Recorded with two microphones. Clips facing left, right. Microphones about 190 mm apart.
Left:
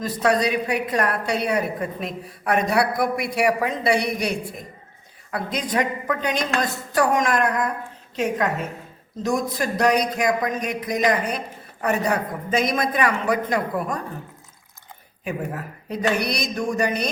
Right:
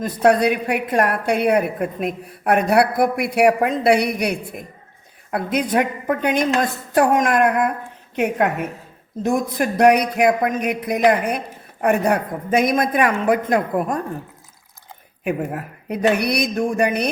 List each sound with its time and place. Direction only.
0.0 s a woman's voice: 55° right (ahead or behind)
15.2 s a woman's voice: 60° right (ahead or behind)